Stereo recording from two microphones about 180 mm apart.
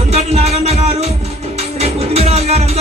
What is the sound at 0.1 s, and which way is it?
Music, 35° right (ahead or behind).